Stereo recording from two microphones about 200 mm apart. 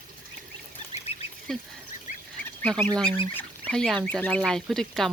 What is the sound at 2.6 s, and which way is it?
Speech, 5° left (ahead or behind).